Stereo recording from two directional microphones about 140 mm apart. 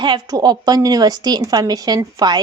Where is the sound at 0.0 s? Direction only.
30° right (ahead or behind).